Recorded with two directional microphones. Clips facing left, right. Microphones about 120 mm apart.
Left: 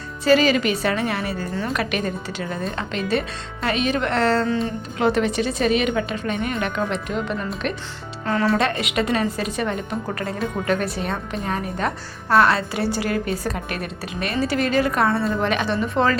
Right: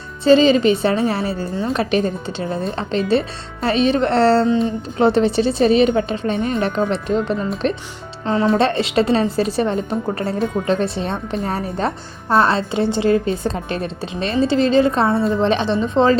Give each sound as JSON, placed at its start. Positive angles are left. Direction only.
{"t": 0.3, "sound": "a woman's voice", "side_deg": -25}
{"t": 8.2, "sound": "a woman's voice", "side_deg": -20}